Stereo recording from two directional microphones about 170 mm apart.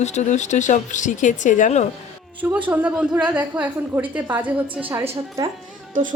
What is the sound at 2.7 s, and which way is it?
A woman's voice, 10° right (ahead or behind).